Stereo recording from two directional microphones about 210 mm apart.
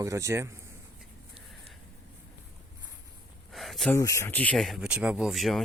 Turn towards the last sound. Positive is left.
turn(degrees=0)  # may be behind; listen again after turning